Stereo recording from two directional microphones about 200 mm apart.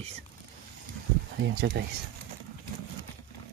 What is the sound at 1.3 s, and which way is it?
Speech, 55° right (ahead or behind).